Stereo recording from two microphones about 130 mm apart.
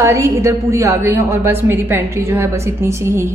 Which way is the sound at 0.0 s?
25° right (ahead or behind).